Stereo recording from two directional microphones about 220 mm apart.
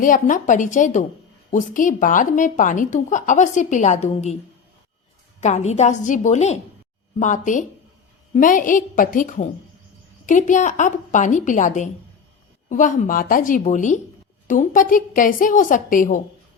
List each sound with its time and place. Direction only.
0.0 s speech: 35° left (ahead or behind)
5.4 s speech: 30° left (ahead or behind)